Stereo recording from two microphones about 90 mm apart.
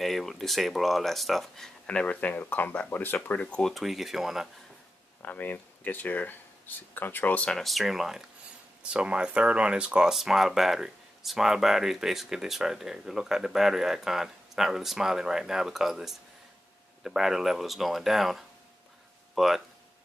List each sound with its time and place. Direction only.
0.0 s speech: centre (ahead or behind)
1.9 s speech: 15° left (ahead or behind)
3.7 s speech: centre (ahead or behind)
5.2 s speech: 20° left (ahead or behind)
7.5 s speech: centre (ahead or behind)